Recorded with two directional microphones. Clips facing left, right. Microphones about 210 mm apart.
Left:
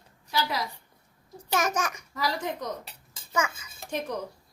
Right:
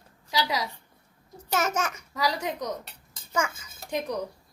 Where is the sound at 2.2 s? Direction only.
90° right.